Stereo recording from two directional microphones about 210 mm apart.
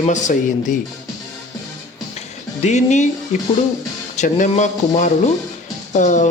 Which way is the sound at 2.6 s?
35° left (ahead or behind).